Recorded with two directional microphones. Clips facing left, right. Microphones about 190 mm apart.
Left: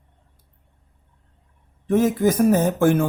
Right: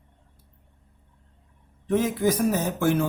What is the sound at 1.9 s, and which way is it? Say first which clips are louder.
Speech: left 4 dB; 45° left (ahead or behind).